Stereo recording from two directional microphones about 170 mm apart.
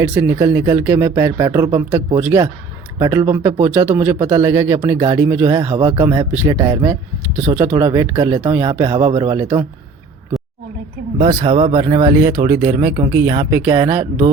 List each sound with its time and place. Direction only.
0.0 s speech: 15° right (ahead or behind)
11.3 s speech: 35° right (ahead or behind); by 14.1 s 20° right (ahead or behind)